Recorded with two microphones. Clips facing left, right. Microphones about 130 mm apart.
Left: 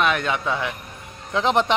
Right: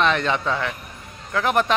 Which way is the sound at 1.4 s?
20° left (ahead or behind).